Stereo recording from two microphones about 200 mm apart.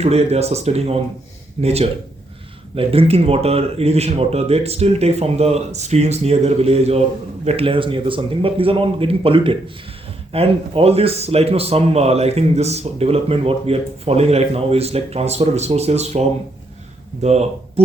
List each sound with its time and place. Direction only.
0.0 s a man's voice: 30° right (ahead or behind)
17.2 s a man's voice: 35° right (ahead or behind)